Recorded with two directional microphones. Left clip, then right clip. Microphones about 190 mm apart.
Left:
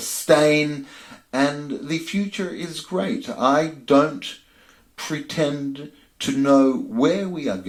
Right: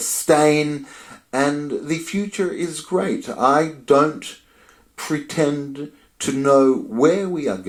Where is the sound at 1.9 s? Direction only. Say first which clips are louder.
Right 1 dB; 40° right (ahead or behind).